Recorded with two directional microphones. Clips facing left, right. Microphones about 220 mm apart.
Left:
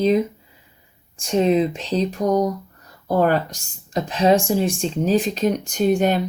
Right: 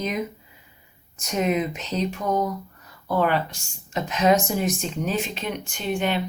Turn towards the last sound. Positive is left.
turn(degrees=40)  # may be behind; listen again after turning